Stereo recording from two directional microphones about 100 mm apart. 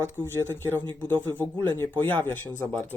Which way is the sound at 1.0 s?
20° left (ahead or behind).